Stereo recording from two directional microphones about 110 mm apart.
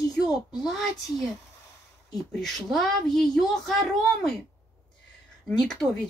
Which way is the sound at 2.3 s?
5° left (ahead or behind).